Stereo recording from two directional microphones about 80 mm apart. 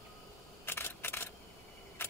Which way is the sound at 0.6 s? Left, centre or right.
Left.